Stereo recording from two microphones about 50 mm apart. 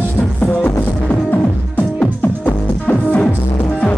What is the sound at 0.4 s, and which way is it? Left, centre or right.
Music, left.